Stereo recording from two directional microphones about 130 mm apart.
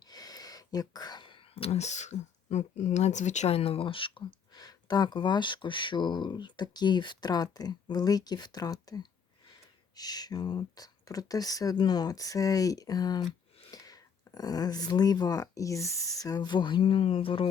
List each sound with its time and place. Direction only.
0.0 s speech: 30° left (ahead or behind)